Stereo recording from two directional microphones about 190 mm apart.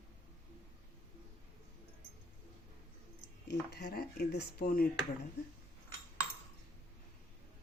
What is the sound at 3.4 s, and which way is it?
Speech, 60° left (ahead or behind).